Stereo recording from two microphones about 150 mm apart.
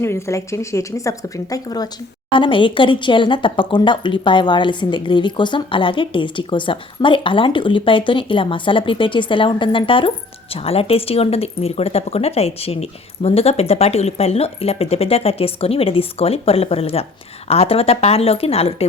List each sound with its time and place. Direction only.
0.0 s a woman's voice: 20° left (ahead or behind); by 18.9 s 40° left (ahead or behind)